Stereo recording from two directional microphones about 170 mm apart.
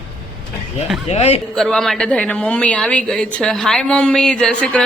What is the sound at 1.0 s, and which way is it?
Speech, 40° left (ahead or behind).